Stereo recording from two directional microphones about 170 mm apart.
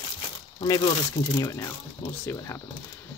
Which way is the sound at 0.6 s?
20° left (ahead or behind).